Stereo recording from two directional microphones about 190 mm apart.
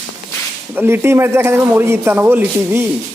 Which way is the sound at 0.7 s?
10° right (ahead or behind).